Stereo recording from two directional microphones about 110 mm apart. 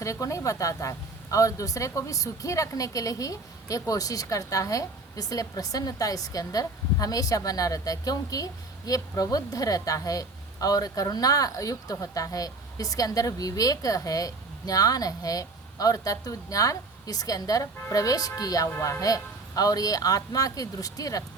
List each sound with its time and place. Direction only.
0.0 s a woman's voice: 30° left (ahead or behind)